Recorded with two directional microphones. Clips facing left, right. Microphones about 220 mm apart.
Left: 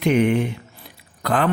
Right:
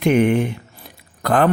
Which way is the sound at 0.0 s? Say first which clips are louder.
Right 2 dB; 50° right (ahead or behind).